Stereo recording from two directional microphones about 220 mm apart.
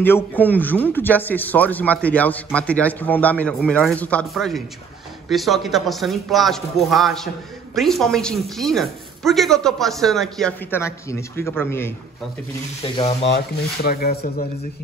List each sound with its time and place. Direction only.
0.0 s a man's voice: 10° left (ahead or behind)
12.8 s speech: 25° left (ahead or behind)
13.8 s speech: 40° left (ahead or behind)